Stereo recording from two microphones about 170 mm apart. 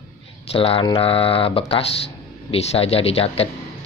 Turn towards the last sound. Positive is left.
turn(degrees=35)  # may be behind; listen again after turning